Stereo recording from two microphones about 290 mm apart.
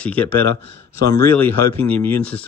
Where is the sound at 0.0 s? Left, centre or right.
Centre.